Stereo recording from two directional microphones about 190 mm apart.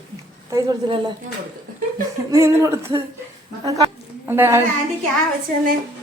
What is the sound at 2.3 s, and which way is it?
Speech, 15° right (ahead or behind).